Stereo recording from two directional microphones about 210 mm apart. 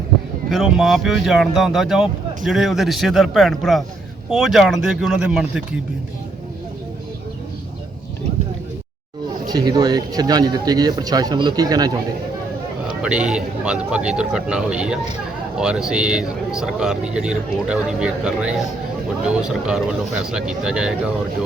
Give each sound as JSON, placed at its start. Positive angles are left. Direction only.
{"t": 0.5, "sound": "speech", "side_deg": 0}
{"t": 9.5, "sound": "speech", "side_deg": -20}
{"t": 13.0, "sound": "speech", "side_deg": -5}